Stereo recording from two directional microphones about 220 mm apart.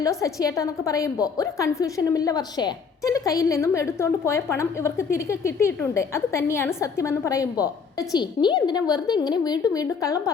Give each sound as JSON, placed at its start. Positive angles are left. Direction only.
{"t": 0.0, "sound": "a woman's voice", "side_deg": 15}